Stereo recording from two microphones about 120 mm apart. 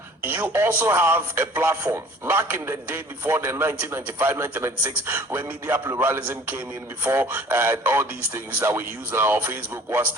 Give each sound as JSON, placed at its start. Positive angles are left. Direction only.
{"t": 0.3, "sound": "a man's voice", "side_deg": -20}